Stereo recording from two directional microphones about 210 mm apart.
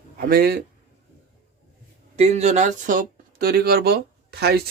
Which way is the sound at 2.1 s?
30° right (ahead or behind).